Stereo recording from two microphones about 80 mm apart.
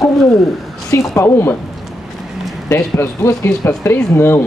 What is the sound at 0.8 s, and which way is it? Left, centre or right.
Speech, left.